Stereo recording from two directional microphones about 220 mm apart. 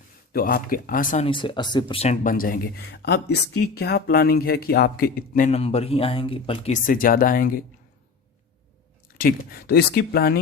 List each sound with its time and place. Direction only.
0.3 s speech: 40° left (ahead or behind)
9.1 s speech: 40° left (ahead or behind)